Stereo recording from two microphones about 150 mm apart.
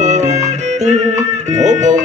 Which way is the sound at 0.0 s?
50° right (ahead or behind).